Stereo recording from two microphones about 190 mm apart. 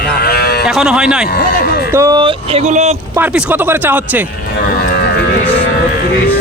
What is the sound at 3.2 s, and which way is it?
Speech, 10° right (ahead or behind).